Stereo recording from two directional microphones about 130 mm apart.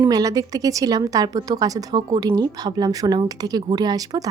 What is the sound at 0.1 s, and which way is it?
A woman's voice, 25° right (ahead or behind).